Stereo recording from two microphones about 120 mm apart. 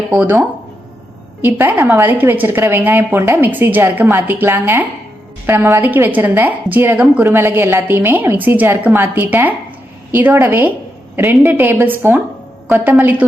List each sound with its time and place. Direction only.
0.1 s a woman's voice: 15° right (ahead or behind)